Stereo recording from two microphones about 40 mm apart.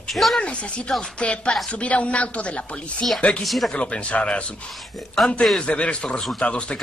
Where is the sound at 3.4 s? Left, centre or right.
Centre.